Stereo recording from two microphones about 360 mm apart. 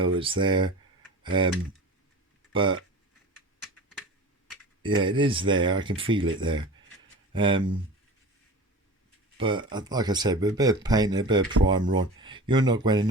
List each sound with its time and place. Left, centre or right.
0.0 s speech: centre
2.5 s speech: centre
4.8 s speech: centre
9.4 s speech: centre